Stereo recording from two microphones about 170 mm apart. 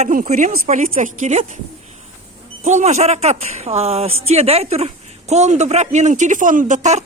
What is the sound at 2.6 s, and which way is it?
A man's voice, 40° right (ahead or behind).